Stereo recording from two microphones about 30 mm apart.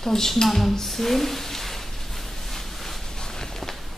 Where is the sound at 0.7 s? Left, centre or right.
Centre.